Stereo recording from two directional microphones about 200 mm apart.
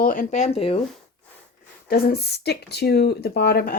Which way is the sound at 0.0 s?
40° left (ahead or behind).